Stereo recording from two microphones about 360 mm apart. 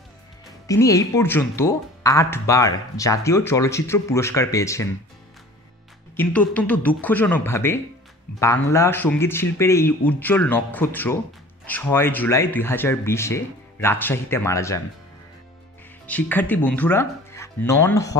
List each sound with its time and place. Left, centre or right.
0.7 s speech: centre
6.1 s speech: centre
16.1 s speech: centre